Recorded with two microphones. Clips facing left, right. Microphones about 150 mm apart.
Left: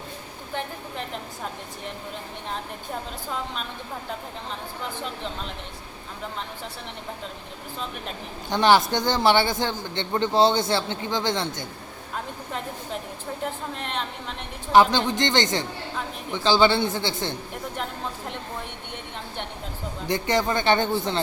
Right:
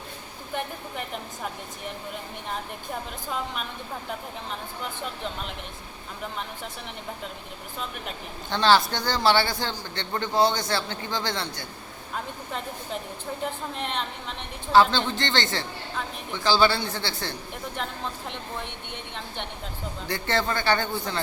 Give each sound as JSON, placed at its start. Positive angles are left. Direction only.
{"t": 8.4, "sound": "a man's voice", "side_deg": 15}
{"t": 13.4, "sound": "a woman's voice", "side_deg": 0}
{"t": 14.7, "sound": "a man's voice", "side_deg": 15}
{"t": 20.1, "sound": "a man's voice", "side_deg": 15}